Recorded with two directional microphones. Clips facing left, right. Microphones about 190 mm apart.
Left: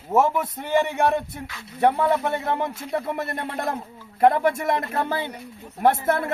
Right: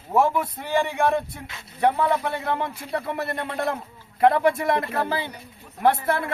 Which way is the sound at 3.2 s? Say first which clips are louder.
Right 1 dB; 45° left (ahead or behind).